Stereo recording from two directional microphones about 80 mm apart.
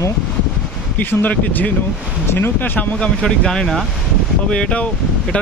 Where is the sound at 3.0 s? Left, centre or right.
Centre.